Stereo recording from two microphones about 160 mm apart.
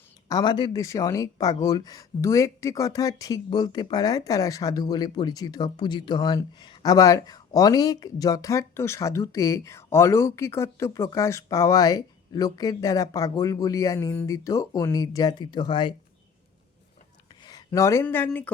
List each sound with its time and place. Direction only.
0.3 s speech: 25° left (ahead or behind)
17.4 s a sound: 20° left (ahead or behind)
18.0 s speech: 10° left (ahead or behind)